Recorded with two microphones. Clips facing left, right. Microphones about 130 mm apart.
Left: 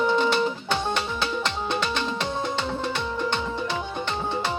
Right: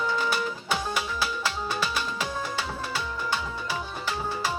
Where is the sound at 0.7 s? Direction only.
10° right (ahead or behind).